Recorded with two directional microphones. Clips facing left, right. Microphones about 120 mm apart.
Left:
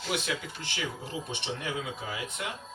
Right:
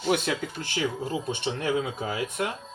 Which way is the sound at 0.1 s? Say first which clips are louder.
Right 7 dB; 50° right (ahead or behind).